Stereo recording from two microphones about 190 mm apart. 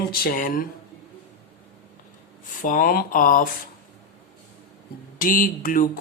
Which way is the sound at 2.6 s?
45° left (ahead or behind).